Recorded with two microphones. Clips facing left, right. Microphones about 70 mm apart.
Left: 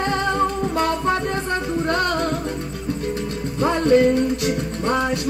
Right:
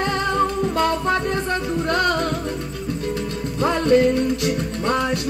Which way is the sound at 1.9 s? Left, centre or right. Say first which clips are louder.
Right 2 dB; left.